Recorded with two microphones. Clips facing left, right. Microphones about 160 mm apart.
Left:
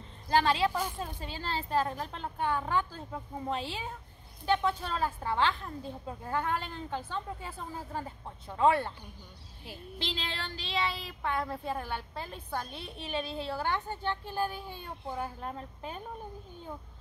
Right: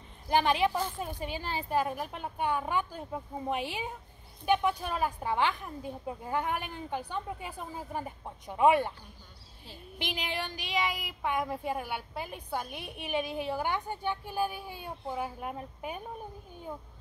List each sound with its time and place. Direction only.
0.3 s a woman's voice: 15° right (ahead or behind)
9.9 s a woman's voice: 15° right (ahead or behind)